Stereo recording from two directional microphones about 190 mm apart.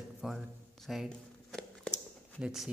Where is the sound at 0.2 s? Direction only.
Centre (ahead or behind).